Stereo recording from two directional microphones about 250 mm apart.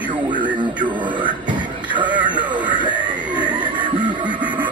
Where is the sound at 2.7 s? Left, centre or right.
Centre.